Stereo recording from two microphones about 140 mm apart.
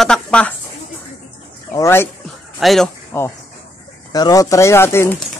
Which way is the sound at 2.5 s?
Centre (ahead or behind).